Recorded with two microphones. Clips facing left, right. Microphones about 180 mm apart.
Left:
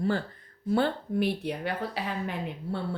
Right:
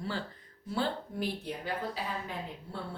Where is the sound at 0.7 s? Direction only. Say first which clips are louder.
Left 7 dB; 60° left (ahead or behind).